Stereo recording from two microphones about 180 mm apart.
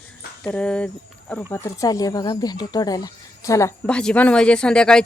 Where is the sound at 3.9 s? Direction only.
5° left (ahead or behind).